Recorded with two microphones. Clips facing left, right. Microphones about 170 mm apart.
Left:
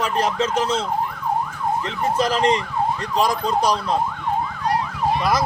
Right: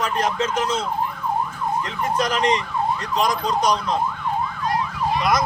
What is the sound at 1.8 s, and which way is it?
Speech, 30° left (ahead or behind).